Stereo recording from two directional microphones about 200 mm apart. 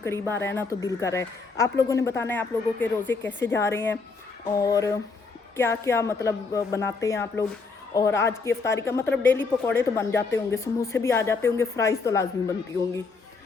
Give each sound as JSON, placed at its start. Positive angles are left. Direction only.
{"t": 0.0, "sound": "speech", "side_deg": 10}